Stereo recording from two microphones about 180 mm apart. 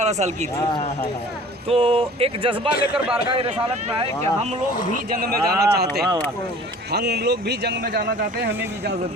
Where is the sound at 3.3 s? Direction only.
30° right (ahead or behind).